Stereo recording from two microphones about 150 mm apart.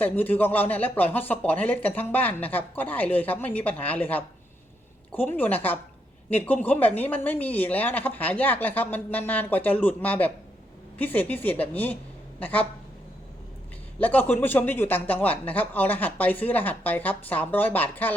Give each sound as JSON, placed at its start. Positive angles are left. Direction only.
{"t": 0.0, "sound": "speech", "side_deg": 10}
{"t": 14.0, "sound": "speech", "side_deg": 10}